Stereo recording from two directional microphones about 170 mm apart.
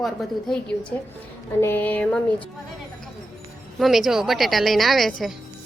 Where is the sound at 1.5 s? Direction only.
15° left (ahead or behind).